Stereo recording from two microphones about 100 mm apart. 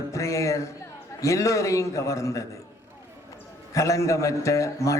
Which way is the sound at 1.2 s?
30° left (ahead or behind).